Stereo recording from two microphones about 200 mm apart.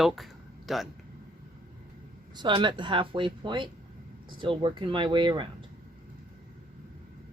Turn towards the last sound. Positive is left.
turn(degrees=-25)  # may be behind; listen again after turning